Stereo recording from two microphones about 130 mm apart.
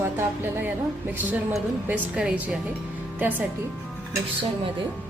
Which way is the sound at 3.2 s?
15° right (ahead or behind).